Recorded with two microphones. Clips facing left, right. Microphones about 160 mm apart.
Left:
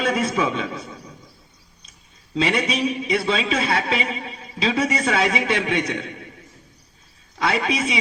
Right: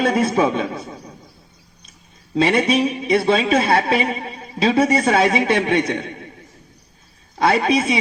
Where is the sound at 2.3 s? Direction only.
50° right (ahead or behind).